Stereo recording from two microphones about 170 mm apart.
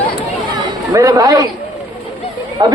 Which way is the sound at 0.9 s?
20° right (ahead or behind).